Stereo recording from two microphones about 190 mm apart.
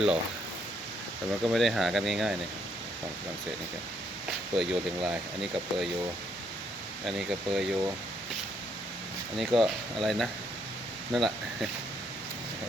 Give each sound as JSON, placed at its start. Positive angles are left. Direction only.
{"t": 1.3, "sound": "speech", "side_deg": 0}
{"t": 4.5, "sound": "speech", "side_deg": 0}
{"t": 7.0, "sound": "speech", "side_deg": 0}
{"t": 9.4, "sound": "speech", "side_deg": 0}